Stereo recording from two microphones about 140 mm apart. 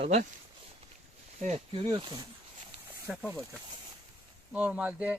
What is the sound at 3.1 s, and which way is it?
Speech, 10° right (ahead or behind).